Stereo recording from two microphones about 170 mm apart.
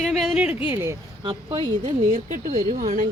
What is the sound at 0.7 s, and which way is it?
Speech, 15° right (ahead or behind).